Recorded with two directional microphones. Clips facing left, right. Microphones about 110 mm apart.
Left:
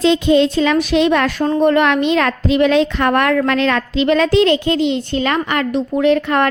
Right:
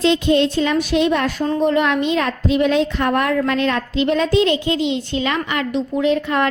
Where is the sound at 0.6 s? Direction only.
90° left.